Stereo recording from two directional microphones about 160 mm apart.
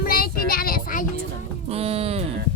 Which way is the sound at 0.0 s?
65° left (ahead or behind).